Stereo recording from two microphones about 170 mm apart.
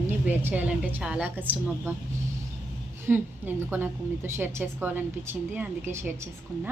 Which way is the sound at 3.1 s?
10° right (ahead or behind).